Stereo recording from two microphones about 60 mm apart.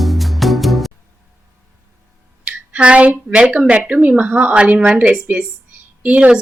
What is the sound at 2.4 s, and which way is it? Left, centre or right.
Speech, right.